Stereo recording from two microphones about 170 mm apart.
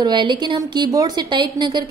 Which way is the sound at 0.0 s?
25° right (ahead or behind).